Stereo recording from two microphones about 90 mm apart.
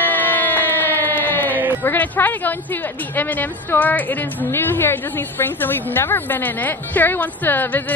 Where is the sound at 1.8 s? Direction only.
20° left (ahead or behind).